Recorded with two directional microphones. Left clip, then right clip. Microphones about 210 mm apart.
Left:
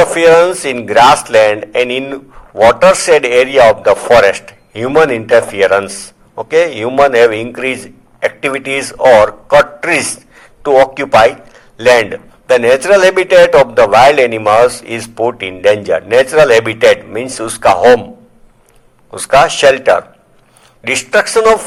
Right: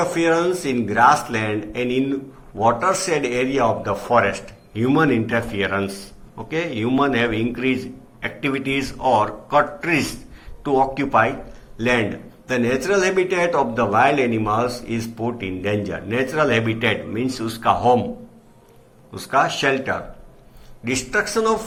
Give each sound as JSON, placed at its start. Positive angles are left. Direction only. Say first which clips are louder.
{"t": 0.1, "sound": "a man's voice", "louder": "left 12 dB", "side_deg": 45}
{"t": 19.1, "sound": "a man's voice", "louder": "left 11 dB", "side_deg": 50}